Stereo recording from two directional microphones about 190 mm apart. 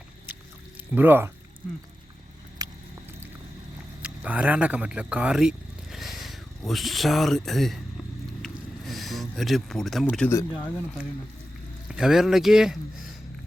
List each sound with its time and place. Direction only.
0.9 s speech: 10° right (ahead or behind)
2.6 s vehicle: 20° right (ahead or behind)
4.0 s speech: 5° right (ahead or behind); by 10.8 s 10° left (ahead or behind)
11.9 s speech: 5° right (ahead or behind)